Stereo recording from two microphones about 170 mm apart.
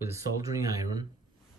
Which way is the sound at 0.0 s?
20° right (ahead or behind).